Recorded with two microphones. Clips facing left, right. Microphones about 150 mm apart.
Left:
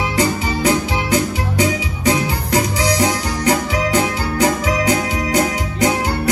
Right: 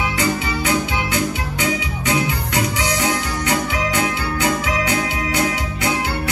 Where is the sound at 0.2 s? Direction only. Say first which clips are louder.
Left 6 dB; 40° left (ahead or behind).